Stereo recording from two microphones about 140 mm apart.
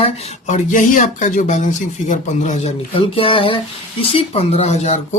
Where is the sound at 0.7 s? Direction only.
65° left (ahead or behind).